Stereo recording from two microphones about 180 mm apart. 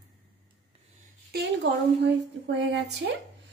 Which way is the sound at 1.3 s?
70° right (ahead or behind).